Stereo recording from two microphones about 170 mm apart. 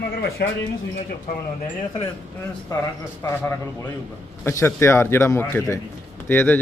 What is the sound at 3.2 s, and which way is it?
A man's voice, 15° left (ahead or behind).